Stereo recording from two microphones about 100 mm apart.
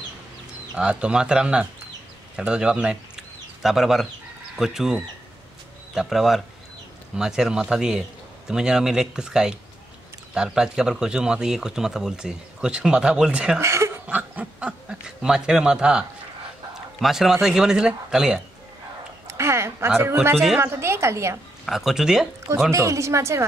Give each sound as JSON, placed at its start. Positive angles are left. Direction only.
{"t": 0.7, "sound": "speech", "side_deg": -10}
{"t": 13.6, "sound": "chuckle", "side_deg": -30}
{"t": 14.0, "sound": "speech", "side_deg": -15}
{"t": 19.2, "sound": "a sound", "side_deg": -25}
{"t": 20.5, "sound": "a woman's voice", "side_deg": -25}
{"t": 21.6, "sound": "speech", "side_deg": -5}
{"t": 22.7, "sound": "a woman's voice", "side_deg": -30}